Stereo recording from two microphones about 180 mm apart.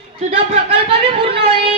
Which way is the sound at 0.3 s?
35° right (ahead or behind).